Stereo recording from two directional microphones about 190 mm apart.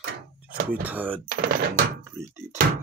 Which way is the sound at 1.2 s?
50° right (ahead or behind).